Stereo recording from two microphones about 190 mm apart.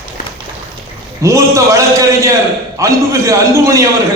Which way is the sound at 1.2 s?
15° right (ahead or behind).